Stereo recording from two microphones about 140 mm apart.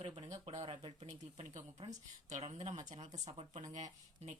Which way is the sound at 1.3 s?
55° right (ahead or behind).